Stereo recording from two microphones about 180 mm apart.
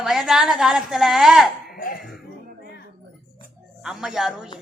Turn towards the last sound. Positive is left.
turn(degrees=-5)  # may be behind; listen again after turning